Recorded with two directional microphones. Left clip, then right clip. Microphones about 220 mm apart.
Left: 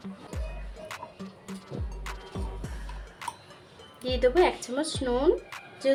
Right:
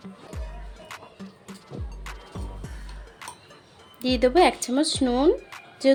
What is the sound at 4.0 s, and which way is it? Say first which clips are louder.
A woman's voice: right 4 dB; 40° right (ahead or behind).